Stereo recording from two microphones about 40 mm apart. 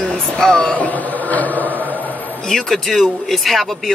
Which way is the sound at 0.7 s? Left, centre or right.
Left.